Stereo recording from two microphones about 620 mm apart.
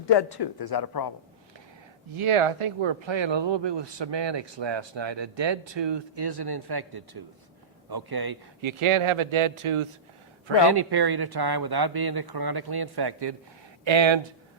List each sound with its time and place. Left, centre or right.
0.0 s speech: left
2.1 s speech: right
8.8 s speech: right
10.7 s speech: right